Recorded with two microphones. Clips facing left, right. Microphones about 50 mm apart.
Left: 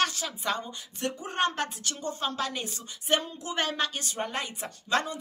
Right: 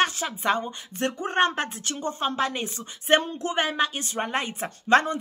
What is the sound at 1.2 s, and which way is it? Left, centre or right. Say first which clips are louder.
Speech: right 5 dB; right.